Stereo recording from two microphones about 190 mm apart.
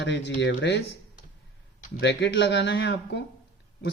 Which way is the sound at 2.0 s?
65° left (ahead or behind).